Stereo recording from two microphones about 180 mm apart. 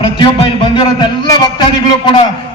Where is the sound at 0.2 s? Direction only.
25° left (ahead or behind).